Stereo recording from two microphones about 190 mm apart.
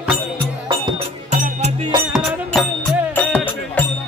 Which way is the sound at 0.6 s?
25° right (ahead or behind).